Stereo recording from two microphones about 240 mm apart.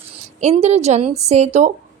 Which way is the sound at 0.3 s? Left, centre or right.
Right.